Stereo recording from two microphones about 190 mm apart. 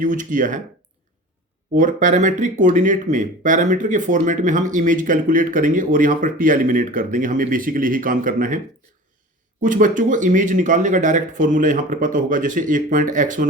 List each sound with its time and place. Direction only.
0.0 s speech: 40° right (ahead or behind)
1.7 s speech: 45° right (ahead or behind)